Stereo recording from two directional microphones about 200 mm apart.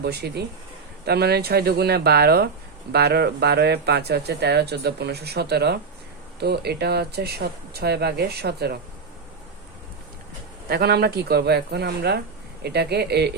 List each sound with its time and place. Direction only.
0.0 s speech: 55° right (ahead or behind)
10.7 s speech: 50° right (ahead or behind)